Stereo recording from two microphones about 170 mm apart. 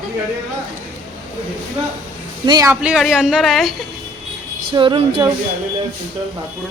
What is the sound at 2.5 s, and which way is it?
Speech, 20° right (ahead or behind).